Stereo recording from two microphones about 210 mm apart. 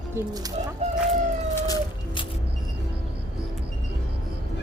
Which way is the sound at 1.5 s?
15° left (ahead or behind).